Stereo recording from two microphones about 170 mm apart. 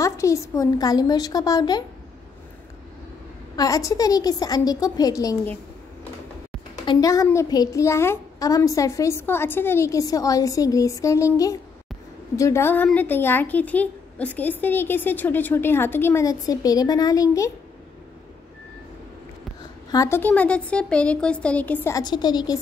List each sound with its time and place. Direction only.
0.0 s a child's voice: 15° left (ahead or behind)
3.5 s a child's voice: 20° left (ahead or behind)
6.9 s a child's voice: 20° left (ahead or behind)
19.9 s a woman's voice: 15° left (ahead or behind)